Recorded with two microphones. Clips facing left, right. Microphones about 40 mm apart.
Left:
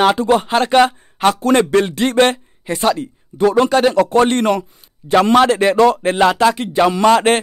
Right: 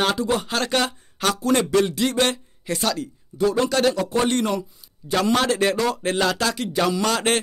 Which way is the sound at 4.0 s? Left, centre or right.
Left.